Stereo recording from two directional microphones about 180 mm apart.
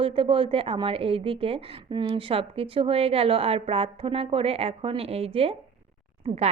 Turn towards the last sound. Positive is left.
turn(degrees=-30)  # may be behind; listen again after turning